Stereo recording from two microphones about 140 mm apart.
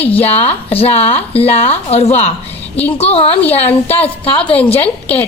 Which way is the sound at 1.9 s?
50° left (ahead or behind).